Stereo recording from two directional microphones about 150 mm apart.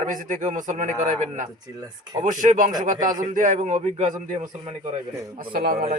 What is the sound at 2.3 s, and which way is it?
A man's voice, 60° right (ahead or behind).